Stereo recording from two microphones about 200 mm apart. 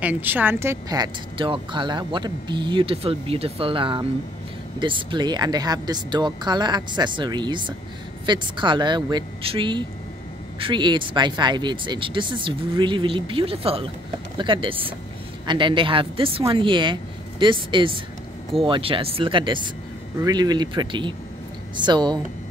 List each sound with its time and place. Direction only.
0.0 s speech: 10° right (ahead or behind)